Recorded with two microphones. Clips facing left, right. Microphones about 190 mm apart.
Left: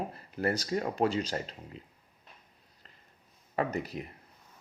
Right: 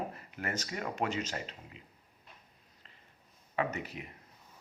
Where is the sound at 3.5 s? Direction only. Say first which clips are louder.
Left 3 dB; 35° left (ahead or behind).